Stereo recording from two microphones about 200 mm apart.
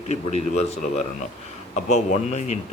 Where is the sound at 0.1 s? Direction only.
35° left (ahead or behind).